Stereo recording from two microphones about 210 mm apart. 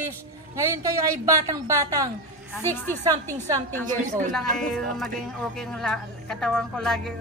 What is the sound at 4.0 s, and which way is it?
Speech, 35° right (ahead or behind).